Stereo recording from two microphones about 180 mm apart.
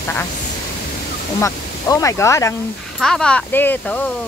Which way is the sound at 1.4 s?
20° left (ahead or behind).